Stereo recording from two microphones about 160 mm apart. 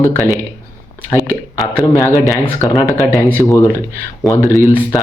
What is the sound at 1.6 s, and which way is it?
A man's voice, 20° left (ahead or behind).